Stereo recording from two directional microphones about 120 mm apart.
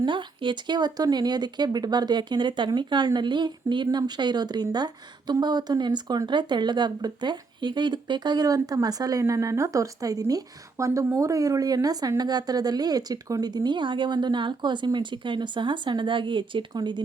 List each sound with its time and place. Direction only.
0.0 s speech: 40° right (ahead or behind)